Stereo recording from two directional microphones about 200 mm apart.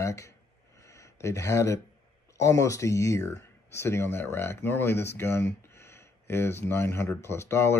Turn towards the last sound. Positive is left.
turn(degrees=15)  # may be behind; listen again after turning